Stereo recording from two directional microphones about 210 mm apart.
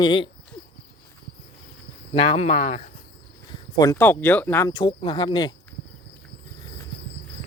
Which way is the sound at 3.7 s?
10° left (ahead or behind).